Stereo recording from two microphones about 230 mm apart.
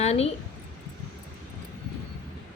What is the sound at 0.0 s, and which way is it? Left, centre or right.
Speech, left.